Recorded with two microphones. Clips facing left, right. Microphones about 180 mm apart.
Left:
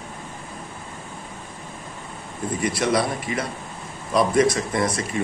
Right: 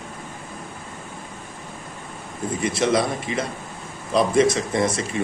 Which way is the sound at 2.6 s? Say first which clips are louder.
Right 1 dB; 25° right (ahead or behind).